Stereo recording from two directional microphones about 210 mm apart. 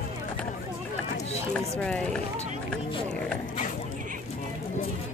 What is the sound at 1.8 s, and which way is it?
Speech, 5° left (ahead or behind).